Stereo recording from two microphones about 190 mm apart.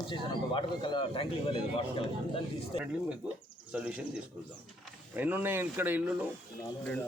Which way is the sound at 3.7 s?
5° right (ahead or behind).